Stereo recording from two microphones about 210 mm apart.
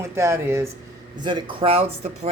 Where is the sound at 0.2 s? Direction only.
10° right (ahead or behind).